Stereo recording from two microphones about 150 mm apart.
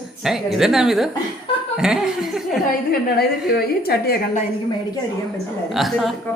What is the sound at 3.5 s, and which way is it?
Speech, 90° left.